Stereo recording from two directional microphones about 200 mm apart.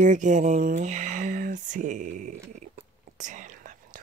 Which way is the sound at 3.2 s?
40° right (ahead or behind).